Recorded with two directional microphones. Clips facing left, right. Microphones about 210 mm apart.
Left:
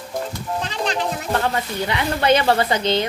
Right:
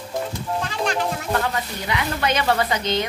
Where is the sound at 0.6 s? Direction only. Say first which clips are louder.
Even; 20° left (ahead or behind).